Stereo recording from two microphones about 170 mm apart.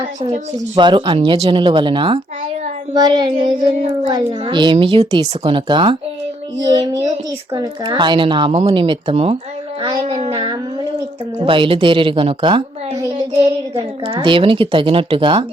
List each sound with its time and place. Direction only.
0.5 s a woman's voice: 25° right (ahead or behind)
9.8 s music: 35° right (ahead or behind)
11.3 s a woman's voice: 30° right (ahead or behind)